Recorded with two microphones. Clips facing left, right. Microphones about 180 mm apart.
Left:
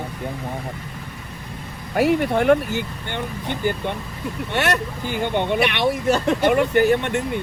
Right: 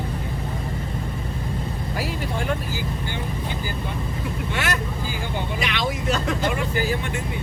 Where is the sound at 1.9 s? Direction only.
60° left (ahead or behind).